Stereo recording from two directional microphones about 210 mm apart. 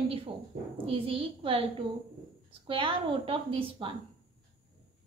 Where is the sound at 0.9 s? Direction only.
25° right (ahead or behind).